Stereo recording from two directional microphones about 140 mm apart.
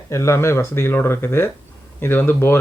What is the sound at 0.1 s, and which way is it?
A man's voice, 20° left (ahead or behind).